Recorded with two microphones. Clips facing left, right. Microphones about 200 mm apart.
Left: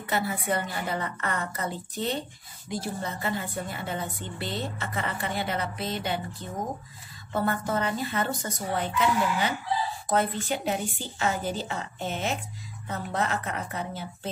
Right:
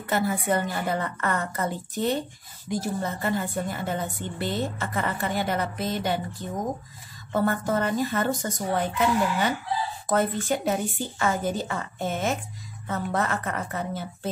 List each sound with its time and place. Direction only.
0.1 s a woman's voice: 50° right (ahead or behind)
7.3 s a woman's voice: 45° right (ahead or behind)